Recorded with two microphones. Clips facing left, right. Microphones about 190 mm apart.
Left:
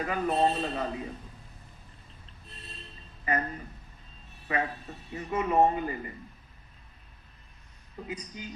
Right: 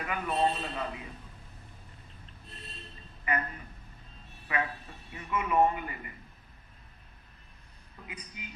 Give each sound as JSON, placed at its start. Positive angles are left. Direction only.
{"t": 0.0, "sound": "speech", "side_deg": 35}
{"t": 3.2, "sound": "speech", "side_deg": 35}
{"t": 7.9, "sound": "speech", "side_deg": 35}